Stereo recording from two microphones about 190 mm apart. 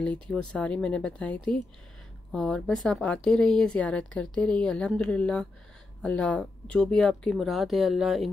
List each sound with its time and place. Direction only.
0.0 s a woman's voice: 5° left (ahead or behind)